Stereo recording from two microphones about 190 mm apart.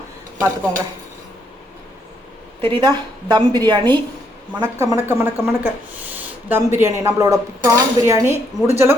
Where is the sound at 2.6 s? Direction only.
25° right (ahead or behind).